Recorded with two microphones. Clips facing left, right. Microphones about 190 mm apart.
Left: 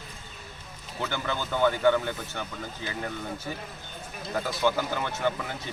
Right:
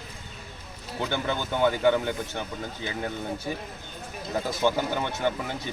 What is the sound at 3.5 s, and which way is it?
Speech, 20° right (ahead or behind).